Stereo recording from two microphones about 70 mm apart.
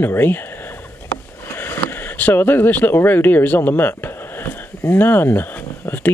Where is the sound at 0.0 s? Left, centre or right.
Left.